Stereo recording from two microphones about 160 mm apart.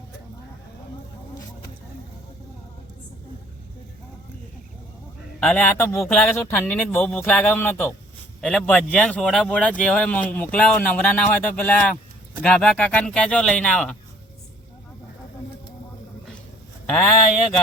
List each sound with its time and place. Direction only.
5.4 s speech: 5° left (ahead or behind)